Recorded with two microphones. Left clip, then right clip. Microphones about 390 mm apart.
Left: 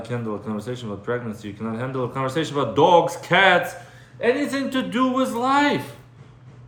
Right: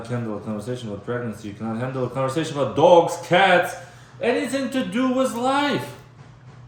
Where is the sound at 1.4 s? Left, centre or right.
Centre.